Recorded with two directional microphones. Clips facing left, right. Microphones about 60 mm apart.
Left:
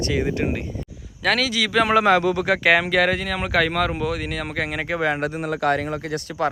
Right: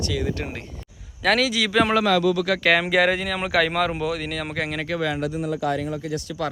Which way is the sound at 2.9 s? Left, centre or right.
Centre.